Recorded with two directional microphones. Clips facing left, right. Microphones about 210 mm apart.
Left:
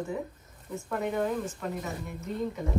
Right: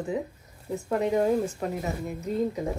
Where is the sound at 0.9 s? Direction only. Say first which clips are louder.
Right 6 dB; 40° right (ahead or behind).